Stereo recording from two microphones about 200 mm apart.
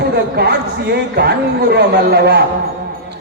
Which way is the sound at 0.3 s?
55° right (ahead or behind).